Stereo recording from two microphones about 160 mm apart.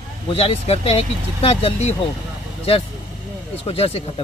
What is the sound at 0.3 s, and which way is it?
Speech, 35° left (ahead or behind).